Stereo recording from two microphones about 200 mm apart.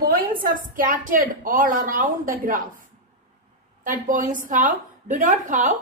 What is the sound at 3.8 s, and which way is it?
A woman's voice, 40° right (ahead or behind).